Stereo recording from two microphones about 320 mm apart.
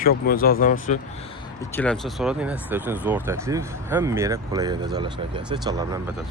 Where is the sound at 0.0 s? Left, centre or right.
Left.